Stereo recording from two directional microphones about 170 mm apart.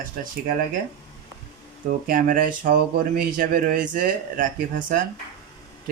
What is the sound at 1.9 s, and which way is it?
Speech, 55° right (ahead or behind).